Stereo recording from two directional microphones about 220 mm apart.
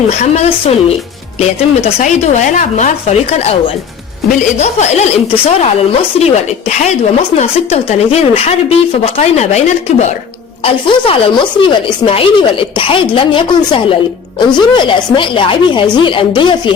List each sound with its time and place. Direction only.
0.1 s a woman's voice: 30° left (ahead or behind)